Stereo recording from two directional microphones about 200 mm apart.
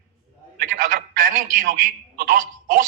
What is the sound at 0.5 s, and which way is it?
A man's voice, 45° right (ahead or behind).